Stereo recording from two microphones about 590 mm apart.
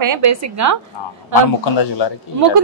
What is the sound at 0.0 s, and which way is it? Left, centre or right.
Speech, right.